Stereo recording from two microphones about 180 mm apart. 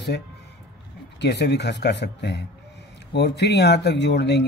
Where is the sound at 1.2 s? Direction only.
70° left (ahead or behind).